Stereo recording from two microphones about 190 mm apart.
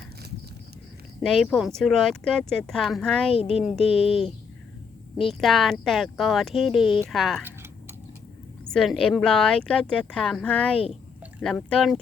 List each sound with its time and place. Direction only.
1.2 s speech: centre (ahead or behind)
3.3 s speech: 30° left (ahead or behind)
3.6 s speech: centre (ahead or behind)
7.4 s a sound: 10° right (ahead or behind)
8.7 s speech: 5° left (ahead or behind)